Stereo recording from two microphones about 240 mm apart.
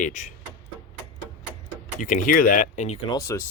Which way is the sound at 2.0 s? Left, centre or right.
Left.